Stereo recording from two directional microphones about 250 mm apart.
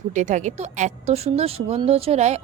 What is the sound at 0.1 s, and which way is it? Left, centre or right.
Speech, right.